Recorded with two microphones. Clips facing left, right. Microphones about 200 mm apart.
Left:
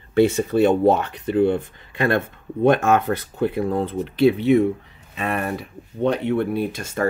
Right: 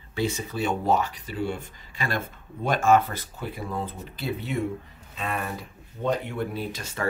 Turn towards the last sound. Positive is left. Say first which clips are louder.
# left 8 dB
turn(degrees=50)  # may be behind; listen again after turning